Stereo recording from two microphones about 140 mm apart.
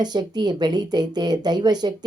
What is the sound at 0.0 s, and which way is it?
Speech, 30° right (ahead or behind).